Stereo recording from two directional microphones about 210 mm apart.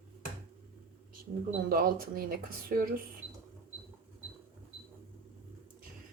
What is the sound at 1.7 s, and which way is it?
Speech, 45° right (ahead or behind).